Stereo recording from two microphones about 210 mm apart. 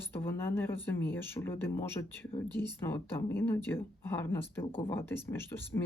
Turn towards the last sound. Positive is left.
turn(degrees=10)  # may be behind; listen again after turning